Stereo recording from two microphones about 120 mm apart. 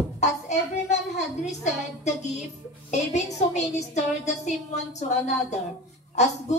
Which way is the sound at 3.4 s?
70° left (ahead or behind).